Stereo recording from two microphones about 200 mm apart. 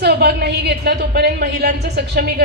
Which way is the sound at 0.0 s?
55° right (ahead or behind).